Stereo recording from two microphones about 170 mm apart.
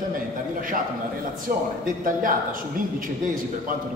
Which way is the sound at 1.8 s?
55° right (ahead or behind).